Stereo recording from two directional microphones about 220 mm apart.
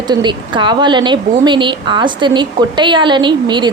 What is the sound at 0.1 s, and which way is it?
A woman's voice, 20° right (ahead or behind).